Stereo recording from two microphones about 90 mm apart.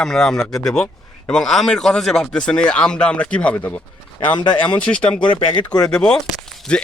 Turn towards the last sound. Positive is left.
turn(degrees=10)  # may be behind; listen again after turning